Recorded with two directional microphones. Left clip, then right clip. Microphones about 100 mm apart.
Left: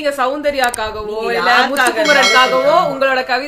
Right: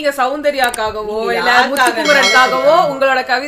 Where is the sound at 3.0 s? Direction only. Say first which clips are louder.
Right 1 dB; 20° right (ahead or behind).